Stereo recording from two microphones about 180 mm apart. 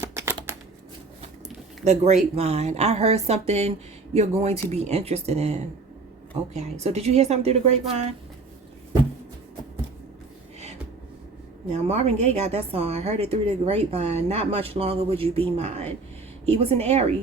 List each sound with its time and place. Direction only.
0.0 s shuffling cards: 15° right (ahead or behind)
1.8 s a woman's voice: 40° right (ahead or behind)
11.7 s a woman's voice: 35° right (ahead or behind)